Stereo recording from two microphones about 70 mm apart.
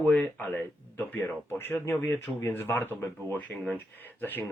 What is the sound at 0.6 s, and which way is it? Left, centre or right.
Speech, left.